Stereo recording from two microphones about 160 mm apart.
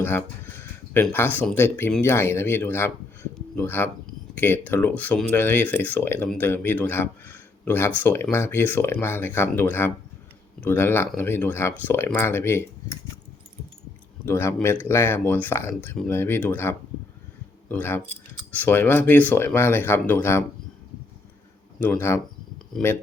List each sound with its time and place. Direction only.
0.0 s a sound: 15° left (ahead or behind)
1.1 s speech: 15° left (ahead or behind)
14.3 s speech: 15° left (ahead or behind)
21.8 s speech: 10° left (ahead or behind)
22.8 s speech: 5° left (ahead or behind)